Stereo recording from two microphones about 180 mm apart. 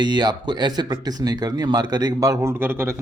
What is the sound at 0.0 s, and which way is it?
Speech, 25° right (ahead or behind).